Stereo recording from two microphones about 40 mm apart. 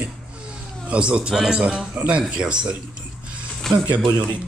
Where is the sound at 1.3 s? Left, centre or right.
Centre.